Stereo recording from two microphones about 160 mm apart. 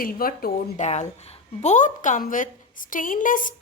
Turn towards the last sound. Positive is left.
turn(degrees=55)  # may be behind; listen again after turning